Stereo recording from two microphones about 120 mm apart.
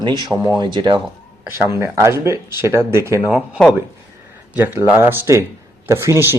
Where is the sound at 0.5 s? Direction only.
40° right (ahead or behind).